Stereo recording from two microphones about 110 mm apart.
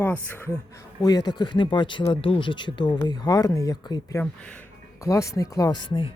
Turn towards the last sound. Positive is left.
turn(degrees=35)  # may be behind; listen again after turning